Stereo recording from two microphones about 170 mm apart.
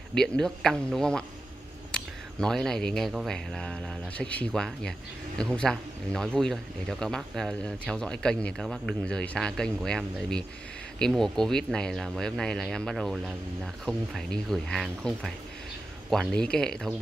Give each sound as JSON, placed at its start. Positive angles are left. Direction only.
{"t": 0.1, "sound": "speech", "side_deg": 5}
{"t": 2.3, "sound": "speech", "side_deg": 5}